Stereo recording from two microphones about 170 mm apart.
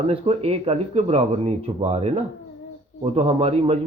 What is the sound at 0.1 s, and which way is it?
Speech, 35° right (ahead or behind).